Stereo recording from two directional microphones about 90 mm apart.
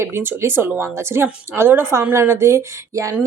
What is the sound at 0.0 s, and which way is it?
Speech, 25° right (ahead or behind).